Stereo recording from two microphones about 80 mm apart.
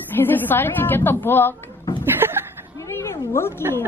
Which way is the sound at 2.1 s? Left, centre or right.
Right.